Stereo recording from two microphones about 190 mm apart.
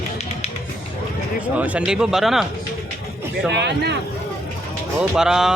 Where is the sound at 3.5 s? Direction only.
65° right (ahead or behind).